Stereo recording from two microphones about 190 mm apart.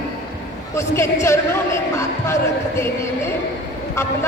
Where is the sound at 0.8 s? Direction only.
15° left (ahead or behind).